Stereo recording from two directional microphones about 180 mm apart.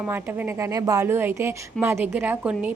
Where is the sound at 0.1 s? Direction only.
15° right (ahead or behind).